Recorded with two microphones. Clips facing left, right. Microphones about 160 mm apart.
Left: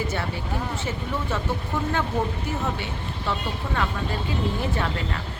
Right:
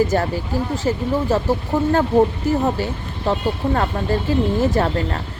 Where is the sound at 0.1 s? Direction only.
40° right (ahead or behind).